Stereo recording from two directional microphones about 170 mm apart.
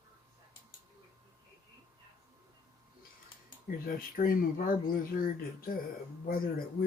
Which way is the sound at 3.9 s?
55° left (ahead or behind).